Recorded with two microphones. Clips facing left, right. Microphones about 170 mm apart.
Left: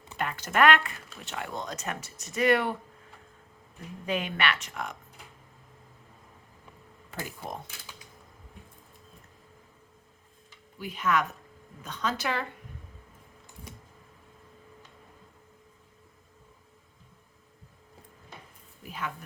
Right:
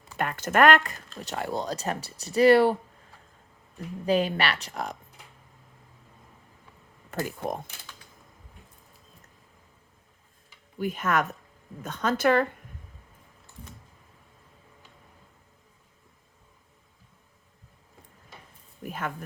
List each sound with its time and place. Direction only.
0.2 s speech: 50° right (ahead or behind)
4.0 s speech: 35° right (ahead or behind)
7.1 s speech: 50° right (ahead or behind)
10.8 s speech: 50° right (ahead or behind)
18.8 s a sound: 50° right (ahead or behind)